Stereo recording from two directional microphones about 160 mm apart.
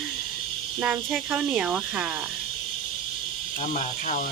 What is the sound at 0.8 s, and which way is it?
Speech, 5° right (ahead or behind).